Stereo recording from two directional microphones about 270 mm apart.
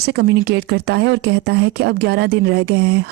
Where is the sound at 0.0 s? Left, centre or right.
Right.